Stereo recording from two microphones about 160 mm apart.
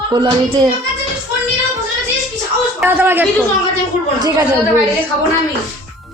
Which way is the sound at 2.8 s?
15° right (ahead or behind).